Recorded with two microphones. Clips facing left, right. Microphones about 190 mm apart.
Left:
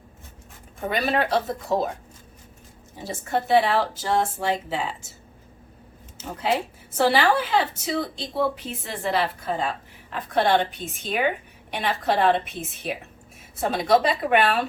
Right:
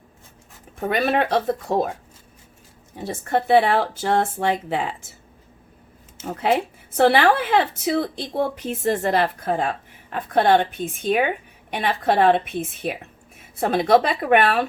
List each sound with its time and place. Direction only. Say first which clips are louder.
1.0 s speech: right 3 dB; 60° right (ahead or behind)
3.0 s speech: right 3 dB; 60° right (ahead or behind)
6.4 s a woman's voice: right 4 dB; 55° right (ahead or behind)